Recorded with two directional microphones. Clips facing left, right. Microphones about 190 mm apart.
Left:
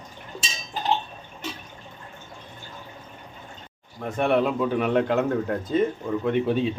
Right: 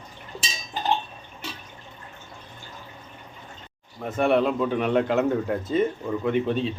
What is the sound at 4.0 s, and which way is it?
Speech, centre (ahead or behind).